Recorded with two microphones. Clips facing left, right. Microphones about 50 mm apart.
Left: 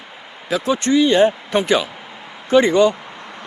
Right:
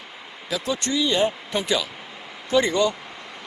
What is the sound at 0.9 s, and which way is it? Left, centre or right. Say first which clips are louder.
Speech: left 8 dB; left.